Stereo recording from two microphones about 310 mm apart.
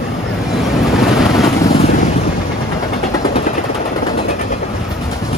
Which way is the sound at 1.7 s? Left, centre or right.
Left.